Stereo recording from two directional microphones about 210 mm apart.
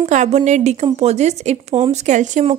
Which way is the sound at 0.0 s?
35° right (ahead or behind).